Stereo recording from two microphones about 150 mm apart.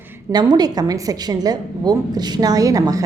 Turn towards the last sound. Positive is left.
turn(degrees=-25)  # may be behind; listen again after turning